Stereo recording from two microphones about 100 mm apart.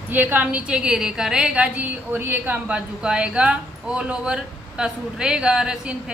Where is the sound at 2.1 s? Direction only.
20° right (ahead or behind).